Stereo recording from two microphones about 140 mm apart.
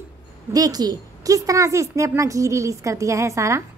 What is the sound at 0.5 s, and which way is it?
A woman's voice, 25° right (ahead or behind).